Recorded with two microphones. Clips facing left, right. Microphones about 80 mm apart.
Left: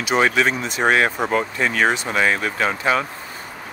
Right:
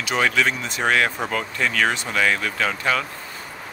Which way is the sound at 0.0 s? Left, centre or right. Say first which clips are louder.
Left 3 dB; left.